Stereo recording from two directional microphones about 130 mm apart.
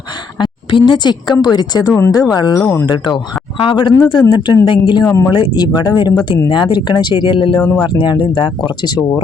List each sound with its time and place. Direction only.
0.3 s a sound: 35° left (ahead or behind)
1.4 s speech: 30° left (ahead or behind)
5.0 s speech: 20° left (ahead or behind)
5.3 s speech: 35° left (ahead or behind)
7.6 s speech: 10° left (ahead or behind)
7.9 s speech: 40° left (ahead or behind)